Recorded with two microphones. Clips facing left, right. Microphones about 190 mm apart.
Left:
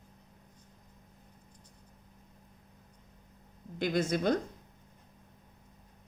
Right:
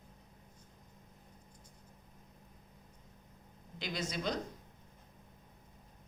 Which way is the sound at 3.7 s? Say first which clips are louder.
Left 10 dB; 50° left (ahead or behind).